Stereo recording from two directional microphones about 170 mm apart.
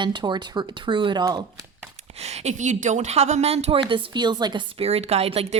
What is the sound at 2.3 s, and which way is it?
A woman's voice, 45° right (ahead or behind).